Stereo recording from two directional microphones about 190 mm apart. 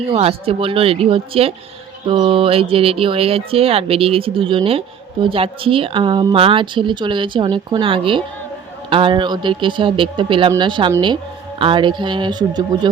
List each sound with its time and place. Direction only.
0.0 s speech: 30° right (ahead or behind)